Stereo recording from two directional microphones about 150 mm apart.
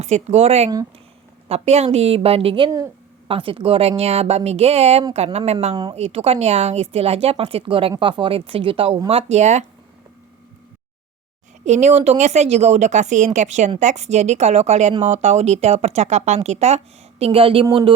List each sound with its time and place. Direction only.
0.0 s speech: 50° right (ahead or behind)
11.6 s speech: 50° right (ahead or behind)